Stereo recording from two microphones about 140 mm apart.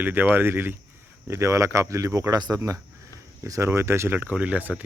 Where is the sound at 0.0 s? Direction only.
15° right (ahead or behind).